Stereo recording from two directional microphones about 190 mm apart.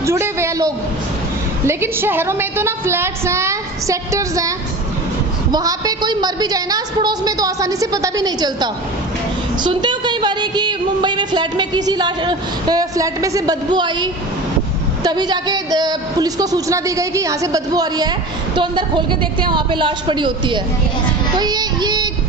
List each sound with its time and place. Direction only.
0.0 s a woman's voice: 15° right (ahead or behind)
21.3 s child singing: 20° right (ahead or behind)